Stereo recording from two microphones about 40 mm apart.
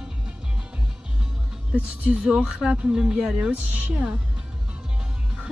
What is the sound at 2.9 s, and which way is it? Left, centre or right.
Speech, centre.